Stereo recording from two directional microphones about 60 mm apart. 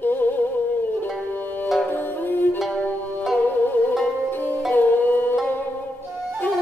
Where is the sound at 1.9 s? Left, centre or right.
Left.